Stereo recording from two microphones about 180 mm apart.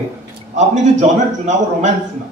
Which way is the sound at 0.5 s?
40° right (ahead or behind).